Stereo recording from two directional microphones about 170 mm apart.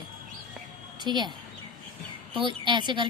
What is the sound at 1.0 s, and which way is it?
Speech, 25° right (ahead or behind).